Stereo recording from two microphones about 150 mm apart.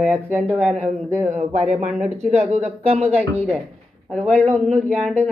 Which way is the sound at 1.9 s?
5° right (ahead or behind).